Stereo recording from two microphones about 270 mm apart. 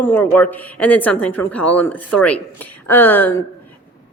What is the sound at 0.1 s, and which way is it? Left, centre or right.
A woman's voice, centre.